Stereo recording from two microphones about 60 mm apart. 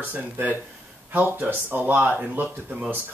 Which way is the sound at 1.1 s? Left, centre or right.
Right.